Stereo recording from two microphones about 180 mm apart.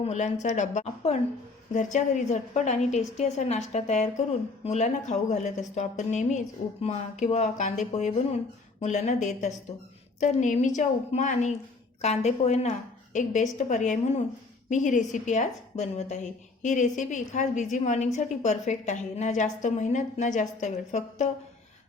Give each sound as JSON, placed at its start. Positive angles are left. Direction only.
{"t": 0.0, "sound": "a woman's voice", "side_deg": 40}